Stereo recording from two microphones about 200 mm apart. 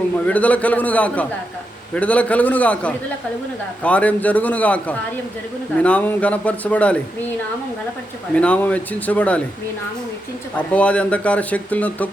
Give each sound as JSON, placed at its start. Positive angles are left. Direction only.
{"t": 0.3, "sound": "speech", "side_deg": 5}
{"t": 8.4, "sound": "speech", "side_deg": 5}
{"t": 10.7, "sound": "speech", "side_deg": 5}